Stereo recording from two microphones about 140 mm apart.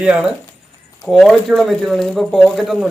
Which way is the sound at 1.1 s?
Centre (ahead or behind).